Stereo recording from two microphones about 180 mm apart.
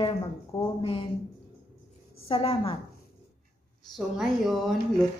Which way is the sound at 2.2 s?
30° left (ahead or behind).